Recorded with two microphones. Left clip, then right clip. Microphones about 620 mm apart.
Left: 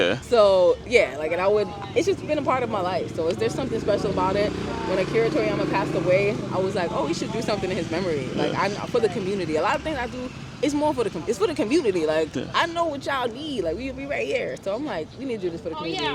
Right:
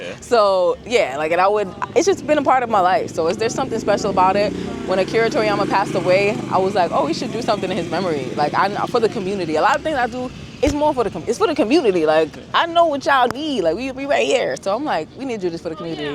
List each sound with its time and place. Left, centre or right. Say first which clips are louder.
0.3 s speech: right 3 dB; right